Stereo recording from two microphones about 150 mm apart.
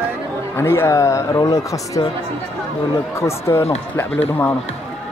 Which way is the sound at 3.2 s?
20° left (ahead or behind).